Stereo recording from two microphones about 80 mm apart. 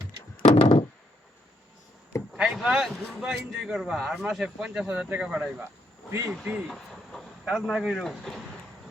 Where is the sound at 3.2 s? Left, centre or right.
Centre.